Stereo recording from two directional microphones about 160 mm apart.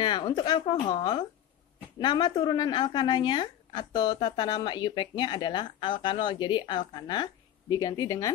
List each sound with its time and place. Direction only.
0.0 s a woman's voice: 30° left (ahead or behind)